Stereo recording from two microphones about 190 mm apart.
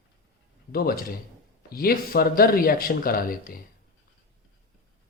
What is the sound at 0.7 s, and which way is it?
Speech, 50° left (ahead or behind).